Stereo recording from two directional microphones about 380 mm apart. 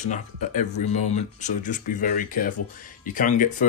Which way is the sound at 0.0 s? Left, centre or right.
Centre.